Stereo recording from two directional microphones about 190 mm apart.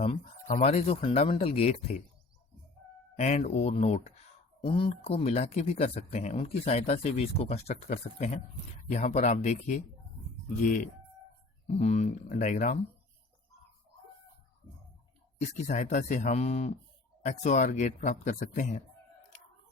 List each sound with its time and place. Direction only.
0.4 s speech: 45° left (ahead or behind)
3.2 s speech: 35° left (ahead or behind)
11.8 s speech: 35° left (ahead or behind)
15.4 s speech: 40° left (ahead or behind)